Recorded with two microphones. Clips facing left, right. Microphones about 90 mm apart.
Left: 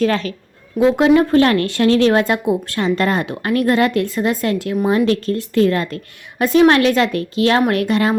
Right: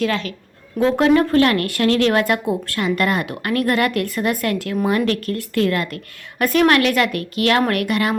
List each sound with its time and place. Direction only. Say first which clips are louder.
0.0 s a woman's voice: left 4 dB; 35° left (ahead or behind)
0.8 s speech: left 3 dB; 15° left (ahead or behind)